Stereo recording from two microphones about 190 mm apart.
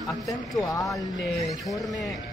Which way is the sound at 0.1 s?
Centre (ahead or behind).